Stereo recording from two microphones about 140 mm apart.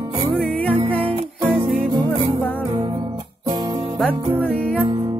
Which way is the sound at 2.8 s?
35° right (ahead or behind).